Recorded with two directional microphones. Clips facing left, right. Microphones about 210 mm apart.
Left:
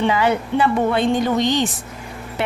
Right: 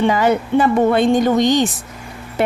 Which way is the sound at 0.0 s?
45° right (ahead or behind).